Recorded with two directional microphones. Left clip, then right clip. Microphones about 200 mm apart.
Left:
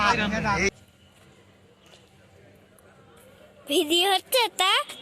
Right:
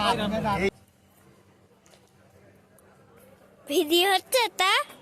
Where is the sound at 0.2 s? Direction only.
50° right (ahead or behind).